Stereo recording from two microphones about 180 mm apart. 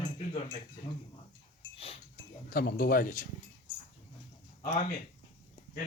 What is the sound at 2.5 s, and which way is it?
Speech, 60° left (ahead or behind).